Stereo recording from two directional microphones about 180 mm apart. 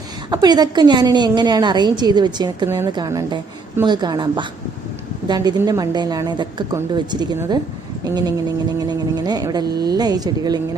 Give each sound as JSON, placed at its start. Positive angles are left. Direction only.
{"t": 0.3, "sound": "a woman's voice", "side_deg": -20}
{"t": 8.0, "sound": "a sound", "side_deg": -20}
{"t": 8.8, "sound": "a woman's voice", "side_deg": -20}